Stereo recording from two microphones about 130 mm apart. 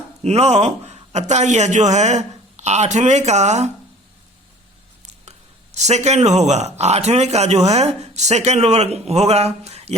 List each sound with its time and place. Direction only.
0.2 s speech: 55° right (ahead or behind)
5.7 s speech: 60° right (ahead or behind)